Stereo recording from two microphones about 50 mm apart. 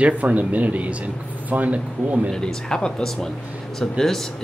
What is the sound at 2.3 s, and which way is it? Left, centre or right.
Speech, centre.